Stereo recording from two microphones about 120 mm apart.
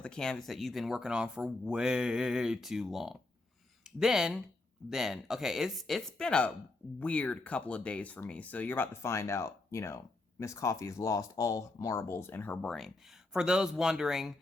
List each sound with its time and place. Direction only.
0.0 s speech: 5° left (ahead or behind)
12.6 s speech: 5° left (ahead or behind)